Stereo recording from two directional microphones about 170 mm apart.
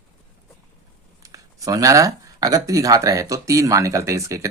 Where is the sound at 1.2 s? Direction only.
20° right (ahead or behind).